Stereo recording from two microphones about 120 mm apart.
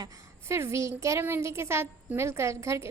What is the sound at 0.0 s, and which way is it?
A woman's voice, 25° right (ahead or behind).